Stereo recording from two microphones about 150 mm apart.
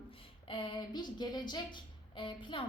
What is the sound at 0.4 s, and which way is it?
A woman's voice, 35° left (ahead or behind).